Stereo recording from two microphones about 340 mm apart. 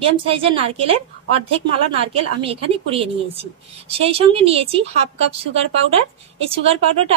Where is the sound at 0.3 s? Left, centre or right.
Centre.